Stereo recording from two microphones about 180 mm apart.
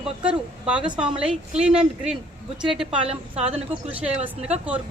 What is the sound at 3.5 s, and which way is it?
Speech, 10° right (ahead or behind).